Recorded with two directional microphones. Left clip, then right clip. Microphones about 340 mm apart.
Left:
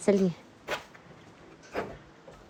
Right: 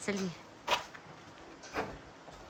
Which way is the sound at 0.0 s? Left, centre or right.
Centre.